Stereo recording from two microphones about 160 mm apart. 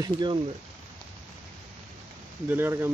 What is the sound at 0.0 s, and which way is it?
Speech, 30° right (ahead or behind).